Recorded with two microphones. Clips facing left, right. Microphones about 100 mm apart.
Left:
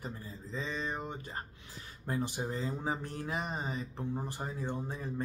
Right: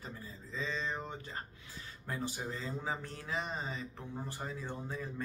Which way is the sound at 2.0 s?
25° left (ahead or behind).